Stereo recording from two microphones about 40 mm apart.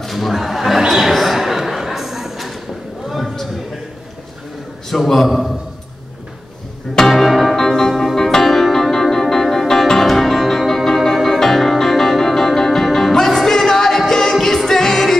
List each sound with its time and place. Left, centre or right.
0.0 s a sound: centre
4.8 s a man's voice: centre
7.0 s music: centre
7.5 s music: centre